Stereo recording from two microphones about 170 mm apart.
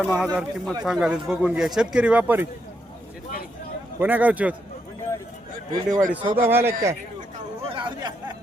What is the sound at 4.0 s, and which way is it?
Speech, 10° right (ahead or behind).